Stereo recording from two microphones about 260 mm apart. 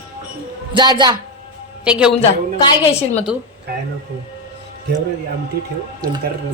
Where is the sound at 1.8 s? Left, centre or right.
Centre.